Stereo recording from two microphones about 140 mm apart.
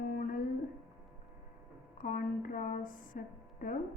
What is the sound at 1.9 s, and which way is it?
A woman's voice, 75° left (ahead or behind).